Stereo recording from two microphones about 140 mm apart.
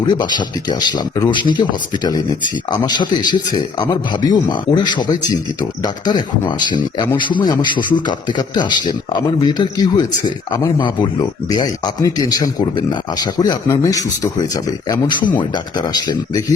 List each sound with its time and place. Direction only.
0.1 s speech: 30° left (ahead or behind)
2.8 s a man's voice: 30° left (ahead or behind)